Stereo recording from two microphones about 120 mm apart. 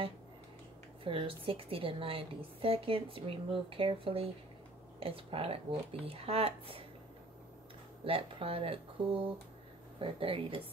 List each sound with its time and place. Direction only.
1.0 s a woman's voice: 50° right (ahead or behind)
8.0 s a woman's voice: 50° right (ahead or behind)